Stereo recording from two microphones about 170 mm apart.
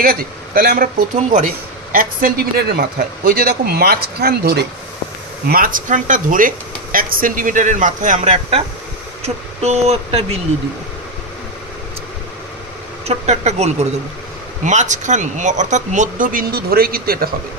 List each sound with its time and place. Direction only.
0.0 s a man's voice: 60° right (ahead or behind)
1.3 s a man's voice: 50° right (ahead or behind); by 4.6 s 65° right (ahead or behind)
5.5 s speech: 55° right (ahead or behind); by 10.2 s 40° right (ahead or behind)
13.0 s speech: 40° right (ahead or behind); by 17.3 s 60° right (ahead or behind)